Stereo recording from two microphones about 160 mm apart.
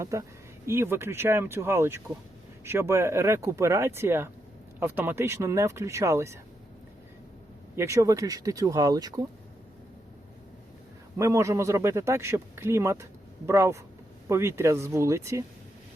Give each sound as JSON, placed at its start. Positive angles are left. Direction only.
{"t": 0.0, "sound": "speech", "side_deg": -20}
{"t": 7.8, "sound": "speech", "side_deg": -20}
{"t": 11.2, "sound": "speech", "side_deg": -20}